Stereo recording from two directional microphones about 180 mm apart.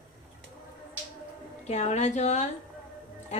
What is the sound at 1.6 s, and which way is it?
Speech, 40° left (ahead or behind).